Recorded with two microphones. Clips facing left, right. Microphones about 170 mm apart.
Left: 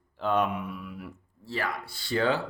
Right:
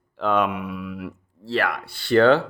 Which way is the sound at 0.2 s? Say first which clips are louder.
Right 5 dB; 75° right (ahead or behind).